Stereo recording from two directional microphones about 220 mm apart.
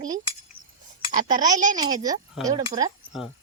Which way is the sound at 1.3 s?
20° right (ahead or behind).